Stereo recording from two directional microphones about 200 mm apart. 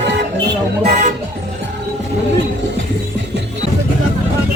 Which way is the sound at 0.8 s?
35° right (ahead or behind).